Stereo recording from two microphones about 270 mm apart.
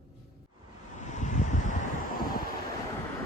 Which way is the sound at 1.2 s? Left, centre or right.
Left.